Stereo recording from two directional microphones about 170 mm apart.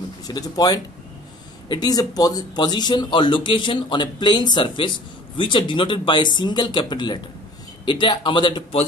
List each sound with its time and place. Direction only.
0.3 s speech: 20° left (ahead or behind)